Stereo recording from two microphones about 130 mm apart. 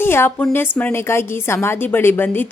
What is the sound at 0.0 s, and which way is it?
A woman's voice, 15° left (ahead or behind).